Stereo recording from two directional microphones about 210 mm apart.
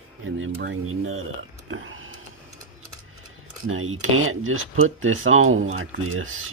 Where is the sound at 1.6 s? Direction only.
70° right (ahead or behind).